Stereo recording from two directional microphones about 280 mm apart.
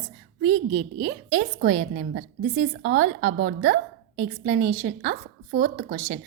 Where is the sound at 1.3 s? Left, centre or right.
Right.